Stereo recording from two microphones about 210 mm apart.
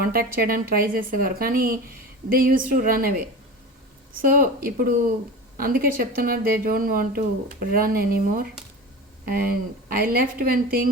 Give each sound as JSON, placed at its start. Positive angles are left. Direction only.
{"t": 0.0, "sound": "speech", "side_deg": -45}